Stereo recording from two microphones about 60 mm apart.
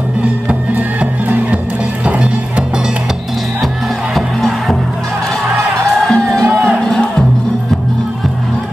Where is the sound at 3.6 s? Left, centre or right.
Centre.